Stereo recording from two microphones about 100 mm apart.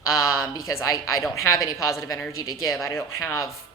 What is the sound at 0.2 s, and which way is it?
Speech, 35° left (ahead or behind).